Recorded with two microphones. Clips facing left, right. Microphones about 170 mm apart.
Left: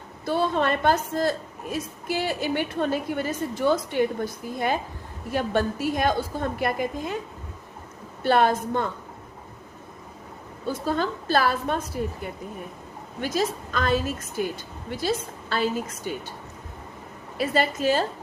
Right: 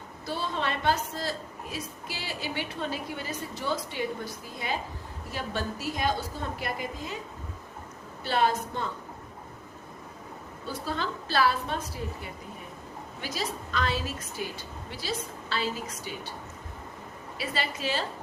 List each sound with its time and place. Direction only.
0.3 s a woman's voice: 55° left (ahead or behind)
8.2 s a woman's voice: 55° left (ahead or behind)
10.7 s a woman's voice: 45° left (ahead or behind)
17.3 s a woman's voice: 50° left (ahead or behind)